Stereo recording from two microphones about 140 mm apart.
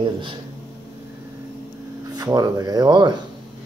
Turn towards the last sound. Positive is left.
turn(degrees=-30)  # may be behind; listen again after turning